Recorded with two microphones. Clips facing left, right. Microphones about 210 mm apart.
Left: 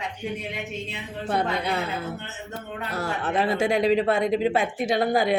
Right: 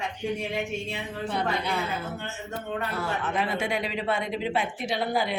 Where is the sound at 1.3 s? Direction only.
60° left (ahead or behind).